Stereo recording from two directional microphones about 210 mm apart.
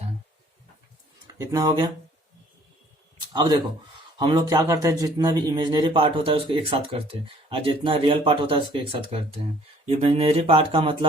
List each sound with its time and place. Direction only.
1.3 s speech: 15° right (ahead or behind)
3.3 s a man's voice: 20° right (ahead or behind)